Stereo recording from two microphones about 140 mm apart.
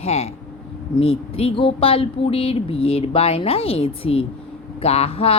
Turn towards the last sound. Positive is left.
turn(degrees=45)  # may be behind; listen again after turning